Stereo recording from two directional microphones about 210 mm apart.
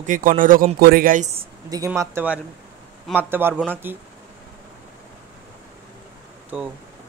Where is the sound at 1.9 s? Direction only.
10° right (ahead or behind).